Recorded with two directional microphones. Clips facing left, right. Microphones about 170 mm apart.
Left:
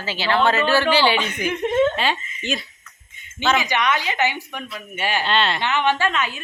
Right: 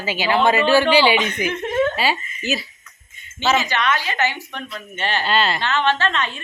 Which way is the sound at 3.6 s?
15° left (ahead or behind).